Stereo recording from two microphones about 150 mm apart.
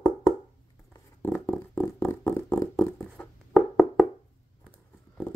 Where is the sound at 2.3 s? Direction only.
15° left (ahead or behind).